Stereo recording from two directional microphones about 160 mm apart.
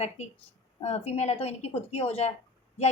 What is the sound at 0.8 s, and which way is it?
A woman's voice, 40° left (ahead or behind).